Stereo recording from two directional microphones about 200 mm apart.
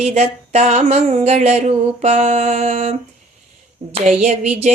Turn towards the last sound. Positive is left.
turn(degrees=-35)  # may be behind; listen again after turning